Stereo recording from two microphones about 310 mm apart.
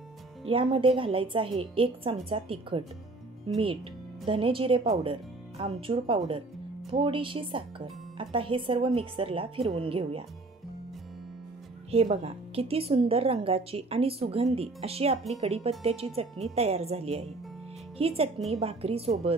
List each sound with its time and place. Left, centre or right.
0.5 s a woman's voice: centre
11.9 s a woman's voice: centre